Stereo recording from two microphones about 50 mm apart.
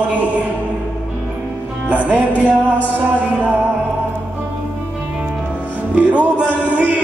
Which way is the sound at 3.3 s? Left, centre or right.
Right.